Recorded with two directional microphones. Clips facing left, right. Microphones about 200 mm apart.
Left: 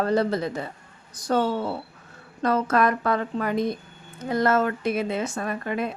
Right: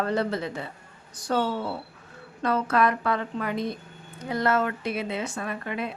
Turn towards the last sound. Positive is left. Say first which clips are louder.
# left 4 dB
turn(degrees=40)  # may be behind; listen again after turning